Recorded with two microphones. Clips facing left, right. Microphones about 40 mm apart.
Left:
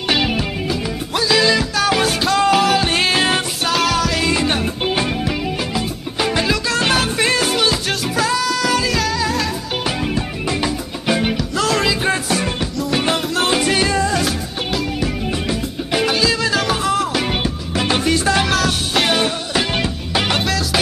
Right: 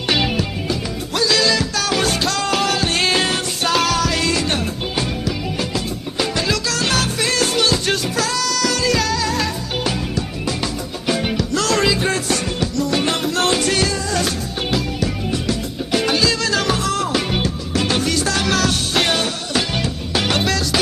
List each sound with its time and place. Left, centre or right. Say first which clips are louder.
0.1 s music: left 1 dB; centre
4.3 s music: left 2 dB; centre
4.8 s music: left 3 dB; left
7.3 s music: left 1 dB; centre
10.1 s music: left 2 dB; centre
11.3 s music: even; centre
13.8 s music: left 5 dB; left
14.1 s music: left 1 dB; centre
15.0 s music: left 1 dB; centre
16.1 s music: left 1 dB; centre
18.5 s music: left 1 dB; centre
19.2 s music: left 2 dB; left
20.2 s music: right 2 dB; centre